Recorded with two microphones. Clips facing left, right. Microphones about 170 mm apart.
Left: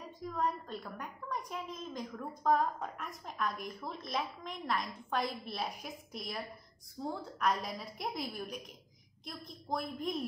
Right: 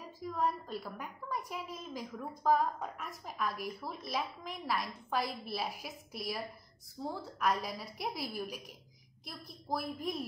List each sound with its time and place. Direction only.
0.0 s a woman's voice: 5° right (ahead or behind)